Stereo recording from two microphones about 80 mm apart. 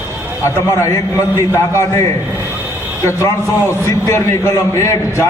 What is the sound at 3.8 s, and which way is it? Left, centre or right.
A man's voice, left.